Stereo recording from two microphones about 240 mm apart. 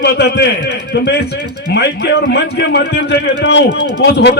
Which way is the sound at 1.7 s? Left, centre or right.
Left.